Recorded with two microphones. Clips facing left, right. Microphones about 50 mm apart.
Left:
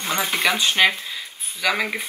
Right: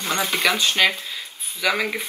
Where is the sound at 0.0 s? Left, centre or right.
Centre.